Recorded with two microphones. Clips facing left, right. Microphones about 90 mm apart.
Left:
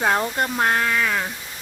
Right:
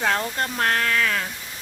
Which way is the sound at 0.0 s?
20° left (ahead or behind).